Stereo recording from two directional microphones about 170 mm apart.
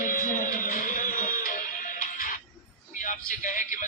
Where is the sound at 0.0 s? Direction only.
50° left (ahead or behind).